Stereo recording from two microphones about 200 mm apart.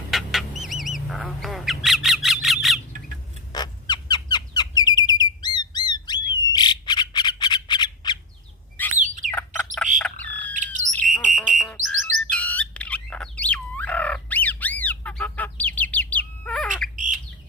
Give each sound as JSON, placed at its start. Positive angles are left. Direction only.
{"t": 0.1, "sound": "duck", "side_deg": 0}
{"t": 3.5, "sound": "bird", "side_deg": 20}
{"t": 6.3, "sound": "squawk", "side_deg": 20}
{"t": 9.0, "sound": "bird", "side_deg": -40}
{"t": 9.3, "sound": "bird", "side_deg": 10}
{"t": 10.5, "sound": "bird", "side_deg": -40}
{"t": 11.3, "sound": "a sound", "side_deg": 0}
{"t": 11.9, "sound": "music", "side_deg": -70}
{"t": 12.3, "sound": "bird", "side_deg": 5}
{"t": 16.9, "sound": "bird", "side_deg": -40}